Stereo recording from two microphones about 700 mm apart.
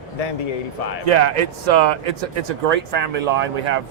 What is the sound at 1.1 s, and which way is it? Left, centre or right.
Speech, right.